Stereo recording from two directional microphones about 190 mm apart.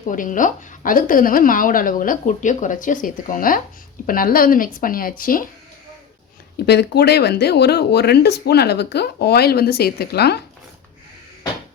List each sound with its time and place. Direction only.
0.1 s a woman's voice: 45° left (ahead or behind)
6.7 s speech: 60° left (ahead or behind)